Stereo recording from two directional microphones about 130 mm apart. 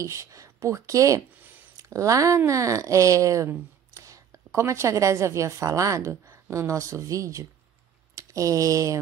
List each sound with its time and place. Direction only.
0.0 s speech: 25° right (ahead or behind)